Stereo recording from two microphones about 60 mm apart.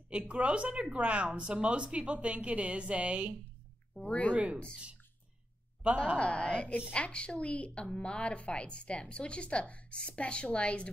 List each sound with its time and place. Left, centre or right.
0.3 s speech: centre
4.0 s a woman's voice: left
4.3 s speech: right
6.1 s a woman's voice: centre